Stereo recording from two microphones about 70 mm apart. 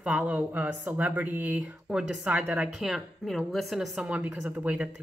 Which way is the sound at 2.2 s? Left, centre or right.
Right.